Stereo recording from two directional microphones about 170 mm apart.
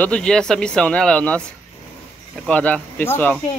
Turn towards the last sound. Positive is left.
turn(degrees=10)  # may be behind; listen again after turning